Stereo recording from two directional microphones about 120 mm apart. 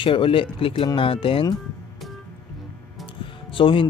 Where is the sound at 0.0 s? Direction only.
45° left (ahead or behind).